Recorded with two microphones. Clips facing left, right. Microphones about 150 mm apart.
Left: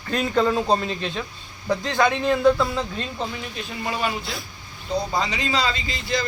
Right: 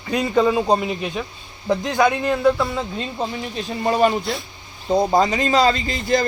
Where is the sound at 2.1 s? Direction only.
5° right (ahead or behind).